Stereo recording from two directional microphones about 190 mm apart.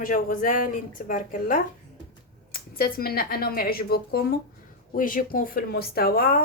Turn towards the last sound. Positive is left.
turn(degrees=50)  # may be behind; listen again after turning